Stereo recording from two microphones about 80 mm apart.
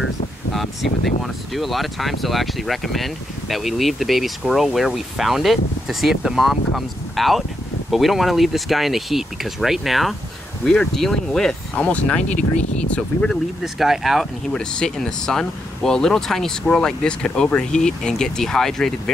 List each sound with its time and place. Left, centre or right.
0.5 s speech: centre
13.3 s speech: centre
14.5 s speech: centre